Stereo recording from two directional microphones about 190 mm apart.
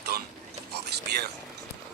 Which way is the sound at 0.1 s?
55° right (ahead or behind).